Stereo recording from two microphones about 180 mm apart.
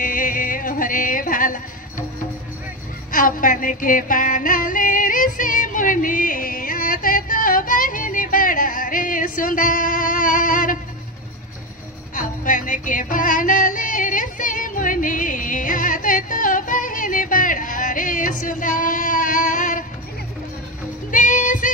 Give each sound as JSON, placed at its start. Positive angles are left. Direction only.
{"t": 0.0, "sound": "music", "side_deg": 50}
{"t": 3.1, "sound": "music", "side_deg": 50}
{"t": 12.2, "sound": "music", "side_deg": 45}
{"t": 21.1, "sound": "music", "side_deg": 45}